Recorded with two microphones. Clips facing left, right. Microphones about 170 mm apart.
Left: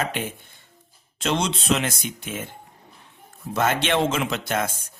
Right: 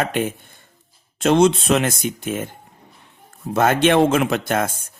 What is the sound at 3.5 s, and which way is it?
Speech, 50° right (ahead or behind).